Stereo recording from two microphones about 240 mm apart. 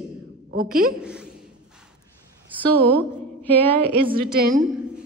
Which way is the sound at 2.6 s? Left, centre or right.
Centre.